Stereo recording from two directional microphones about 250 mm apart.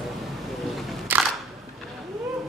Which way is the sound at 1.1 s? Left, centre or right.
Centre.